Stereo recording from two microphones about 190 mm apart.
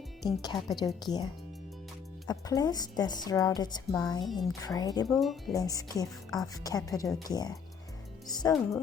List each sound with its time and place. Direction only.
0.8 s a woman's voice: 20° left (ahead or behind)
5.0 s speech: centre (ahead or behind)
5.5 s a woman's voice: 20° left (ahead or behind)